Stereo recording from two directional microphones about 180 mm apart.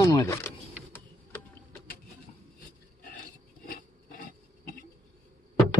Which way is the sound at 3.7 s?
50° left (ahead or behind).